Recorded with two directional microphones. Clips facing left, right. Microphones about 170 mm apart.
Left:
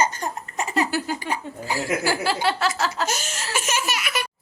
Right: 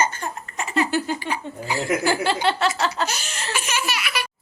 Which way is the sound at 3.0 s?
45° left (ahead or behind).